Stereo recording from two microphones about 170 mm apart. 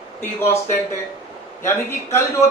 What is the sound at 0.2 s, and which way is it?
A man's voice, 15° left (ahead or behind).